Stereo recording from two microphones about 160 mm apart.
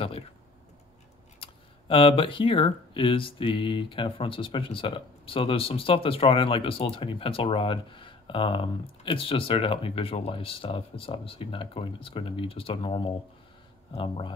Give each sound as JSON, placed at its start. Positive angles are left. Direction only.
{"t": 1.4, "sound": "speech", "side_deg": 35}